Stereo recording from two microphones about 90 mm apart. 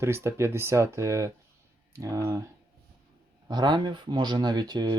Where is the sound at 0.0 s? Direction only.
30° right (ahead or behind).